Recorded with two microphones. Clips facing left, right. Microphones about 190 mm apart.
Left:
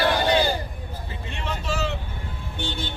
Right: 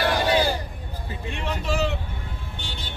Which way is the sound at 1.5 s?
15° right (ahead or behind).